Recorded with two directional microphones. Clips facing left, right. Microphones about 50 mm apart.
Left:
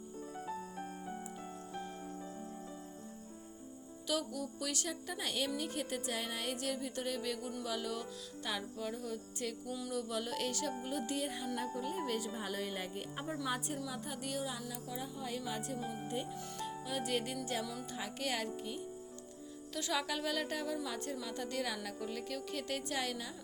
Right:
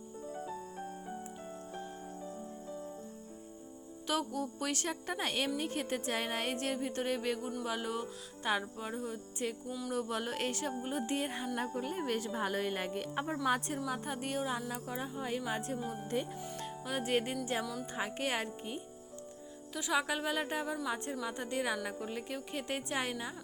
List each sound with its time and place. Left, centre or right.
4.0 s speech: right
7.6 s music: right
9.9 s speech: right
16.1 s speech: right
16.6 s music: right
17.4 s speech: right
19.7 s music: centre